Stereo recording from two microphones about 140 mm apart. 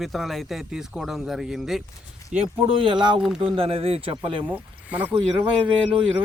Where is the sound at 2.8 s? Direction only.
35° right (ahead or behind).